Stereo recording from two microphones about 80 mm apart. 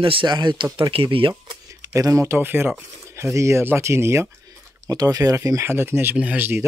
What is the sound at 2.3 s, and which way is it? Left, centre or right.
Speech, right.